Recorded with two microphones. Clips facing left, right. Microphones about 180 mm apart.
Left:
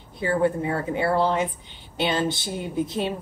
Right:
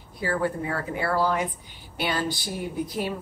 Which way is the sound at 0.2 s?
25° left (ahead or behind).